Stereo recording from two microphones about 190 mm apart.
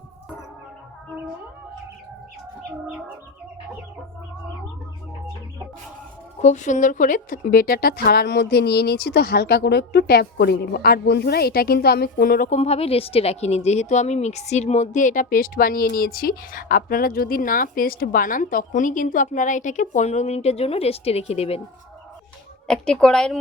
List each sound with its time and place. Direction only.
6.4 s speech: 40° left (ahead or behind)
12.5 s a woman's voice: 30° left (ahead or behind)
22.6 s speech: 5° left (ahead or behind)